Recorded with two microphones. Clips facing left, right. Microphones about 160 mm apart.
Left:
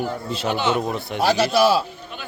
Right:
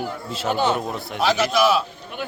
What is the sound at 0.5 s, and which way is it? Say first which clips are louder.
Speech: right 1 dB; 40° right (ahead or behind).